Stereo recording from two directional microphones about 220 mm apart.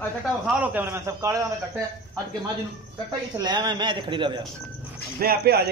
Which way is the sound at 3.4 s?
20° right (ahead or behind).